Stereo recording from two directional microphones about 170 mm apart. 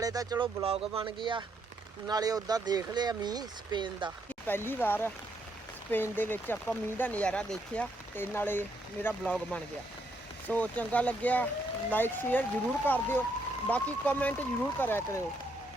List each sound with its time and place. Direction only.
0.0 s speech: 20° right (ahead or behind)
0.6 s speech: 35° right (ahead or behind)
4.4 s speech: 10° left (ahead or behind)